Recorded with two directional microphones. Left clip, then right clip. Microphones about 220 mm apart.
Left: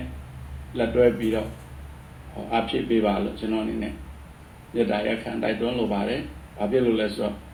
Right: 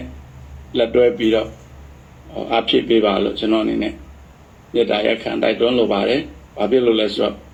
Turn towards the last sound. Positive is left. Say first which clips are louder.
# right 8 dB
turn(degrees=-35)  # may be behind; listen again after turning